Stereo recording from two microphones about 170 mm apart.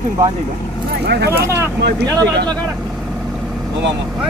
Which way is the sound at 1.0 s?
75° right (ahead or behind).